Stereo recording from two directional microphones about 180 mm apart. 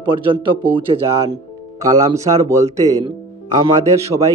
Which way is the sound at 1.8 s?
20° right (ahead or behind).